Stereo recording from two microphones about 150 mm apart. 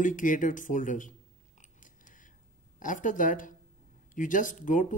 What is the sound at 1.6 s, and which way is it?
Biting, 60° left (ahead or behind).